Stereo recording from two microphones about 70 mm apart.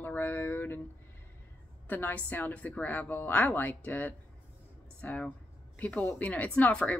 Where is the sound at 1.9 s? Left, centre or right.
Left.